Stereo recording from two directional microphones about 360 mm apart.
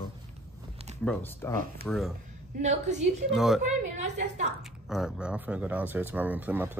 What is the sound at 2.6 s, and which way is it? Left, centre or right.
Speech, centre.